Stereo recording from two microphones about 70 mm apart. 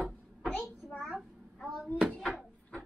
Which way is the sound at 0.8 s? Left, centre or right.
Centre.